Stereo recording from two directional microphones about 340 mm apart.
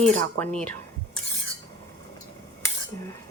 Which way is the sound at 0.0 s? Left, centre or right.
Centre.